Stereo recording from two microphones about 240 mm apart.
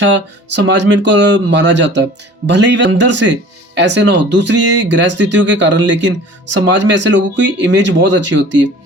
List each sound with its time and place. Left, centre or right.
0.0 s speech: right